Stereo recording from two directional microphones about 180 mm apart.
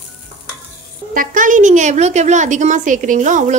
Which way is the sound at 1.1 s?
50° right (ahead or behind).